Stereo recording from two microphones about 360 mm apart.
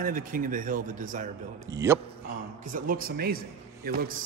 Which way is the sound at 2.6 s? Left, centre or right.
Right.